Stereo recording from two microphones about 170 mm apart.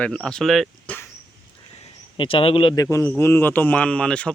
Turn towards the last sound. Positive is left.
turn(degrees=5)  # may be behind; listen again after turning